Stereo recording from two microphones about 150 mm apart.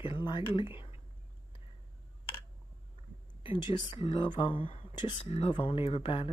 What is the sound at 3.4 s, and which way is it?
Speech, 35° left (ahead or behind).